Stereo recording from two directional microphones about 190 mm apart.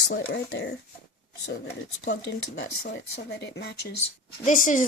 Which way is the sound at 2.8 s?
60° left (ahead or behind).